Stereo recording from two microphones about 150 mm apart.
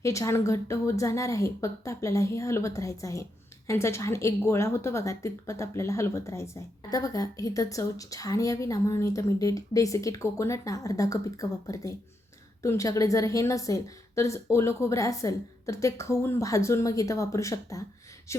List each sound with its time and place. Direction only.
0.0 s a woman's voice: 20° left (ahead or behind)